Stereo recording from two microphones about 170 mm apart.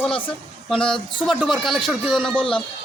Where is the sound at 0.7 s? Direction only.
5° left (ahead or behind).